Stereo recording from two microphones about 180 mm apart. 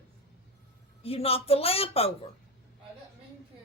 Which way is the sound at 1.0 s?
30° left (ahead or behind).